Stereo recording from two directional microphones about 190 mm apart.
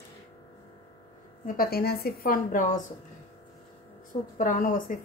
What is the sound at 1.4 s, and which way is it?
Speech, 50° left (ahead or behind).